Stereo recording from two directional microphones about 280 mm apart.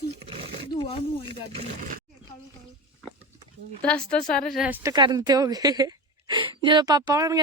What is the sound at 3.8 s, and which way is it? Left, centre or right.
Speech, centre.